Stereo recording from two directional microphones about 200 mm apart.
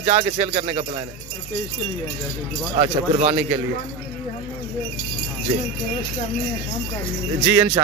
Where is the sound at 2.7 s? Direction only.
30° right (ahead or behind).